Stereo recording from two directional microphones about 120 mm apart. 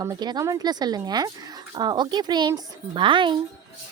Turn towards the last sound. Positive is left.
turn(degrees=-45)  # may be behind; listen again after turning